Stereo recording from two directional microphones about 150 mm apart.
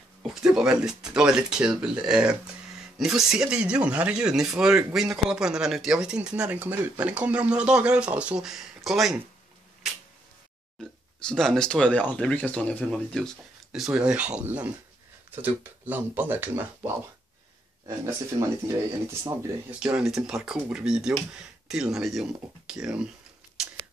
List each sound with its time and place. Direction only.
0.6 s speech: 5° right (ahead or behind)
10.8 s speech: 5° left (ahead or behind); by 18.8 s 20° right (ahead or behind)
19.8 s speech: 5° right (ahead or behind)